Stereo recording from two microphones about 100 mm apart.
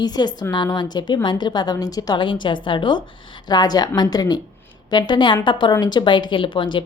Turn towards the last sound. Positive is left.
turn(degrees=55)  # may be behind; listen again after turning